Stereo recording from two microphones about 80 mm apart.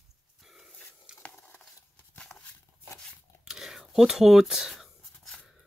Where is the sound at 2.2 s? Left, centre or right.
Centre.